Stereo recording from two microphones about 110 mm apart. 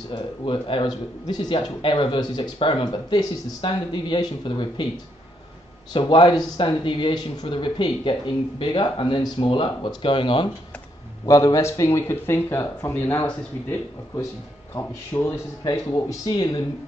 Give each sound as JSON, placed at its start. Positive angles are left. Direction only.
{"t": 0.1, "sound": "speech", "side_deg": 50}
{"t": 5.9, "sound": "speech", "side_deg": 45}
{"t": 11.2, "sound": "speech", "side_deg": 30}
{"t": 15.9, "sound": "speech", "side_deg": 40}